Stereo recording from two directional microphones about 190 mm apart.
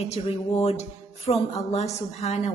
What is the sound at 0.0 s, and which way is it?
Speech, 35° left (ahead or behind).